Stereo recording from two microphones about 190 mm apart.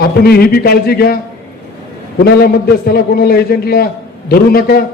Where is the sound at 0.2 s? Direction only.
55° left (ahead or behind).